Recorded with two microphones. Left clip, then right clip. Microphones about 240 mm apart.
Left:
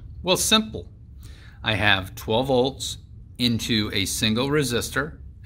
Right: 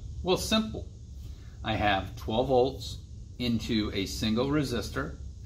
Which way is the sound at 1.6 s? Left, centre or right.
Left.